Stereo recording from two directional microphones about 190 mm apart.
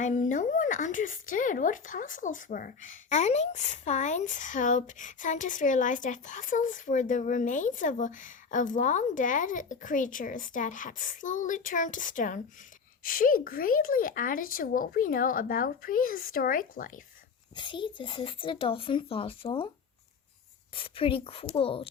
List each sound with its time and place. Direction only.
0.0 s speech: 40° left (ahead or behind)
17.5 s speech: 25° left (ahead or behind)
20.7 s speech: 30° left (ahead or behind)